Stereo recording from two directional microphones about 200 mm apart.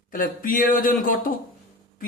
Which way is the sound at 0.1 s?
45° left (ahead or behind).